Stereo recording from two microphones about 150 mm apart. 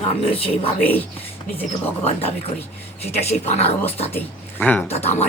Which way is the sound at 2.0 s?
40° left (ahead or behind).